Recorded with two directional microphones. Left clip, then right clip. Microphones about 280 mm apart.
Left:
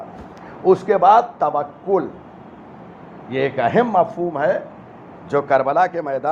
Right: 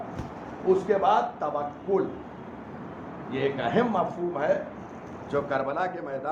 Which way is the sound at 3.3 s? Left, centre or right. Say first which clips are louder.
Left 9 dB; left.